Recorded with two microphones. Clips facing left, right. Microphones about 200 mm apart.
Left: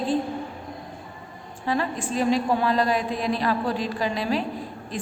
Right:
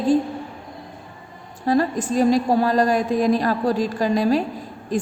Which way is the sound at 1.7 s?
40° right (ahead or behind).